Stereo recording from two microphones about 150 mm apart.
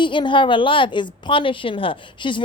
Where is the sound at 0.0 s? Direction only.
35° left (ahead or behind).